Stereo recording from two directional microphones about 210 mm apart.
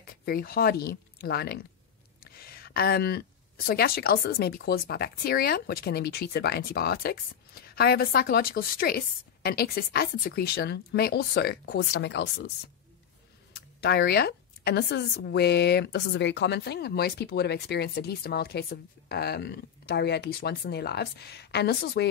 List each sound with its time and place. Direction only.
0.0 s speech: 45° left (ahead or behind)
13.7 s speech: 50° left (ahead or behind)